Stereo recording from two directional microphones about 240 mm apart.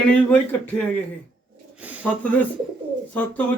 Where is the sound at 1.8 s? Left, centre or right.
Centre.